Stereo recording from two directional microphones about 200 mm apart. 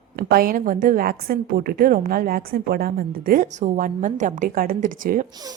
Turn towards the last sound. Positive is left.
turn(degrees=-40)  # may be behind; listen again after turning